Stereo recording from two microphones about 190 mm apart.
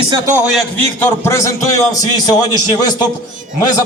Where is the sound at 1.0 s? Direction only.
15° left (ahead or behind).